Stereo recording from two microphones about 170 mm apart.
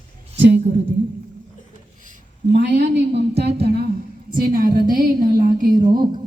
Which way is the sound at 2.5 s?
85° right.